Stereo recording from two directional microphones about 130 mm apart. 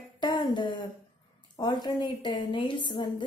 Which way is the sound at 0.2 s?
35° left (ahead or behind).